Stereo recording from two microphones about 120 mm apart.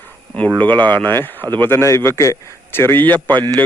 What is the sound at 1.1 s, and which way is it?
Speech, 15° left (ahead or behind).